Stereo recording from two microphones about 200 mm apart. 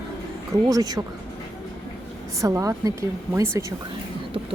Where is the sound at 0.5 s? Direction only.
20° right (ahead or behind).